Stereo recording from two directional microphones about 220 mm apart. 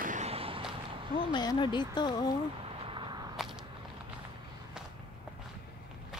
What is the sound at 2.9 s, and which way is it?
Whip, 20° right (ahead or behind).